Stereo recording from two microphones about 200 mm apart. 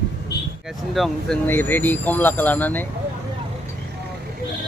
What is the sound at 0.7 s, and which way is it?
A man's voice, centre (ahead or behind).